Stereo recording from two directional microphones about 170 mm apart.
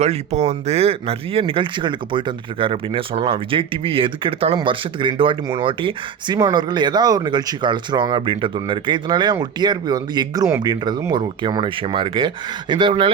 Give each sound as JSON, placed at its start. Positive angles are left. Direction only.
{"t": 0.0, "sound": "speech", "side_deg": -40}